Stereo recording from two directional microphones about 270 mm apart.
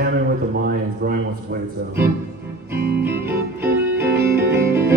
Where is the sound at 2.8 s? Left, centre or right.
Right.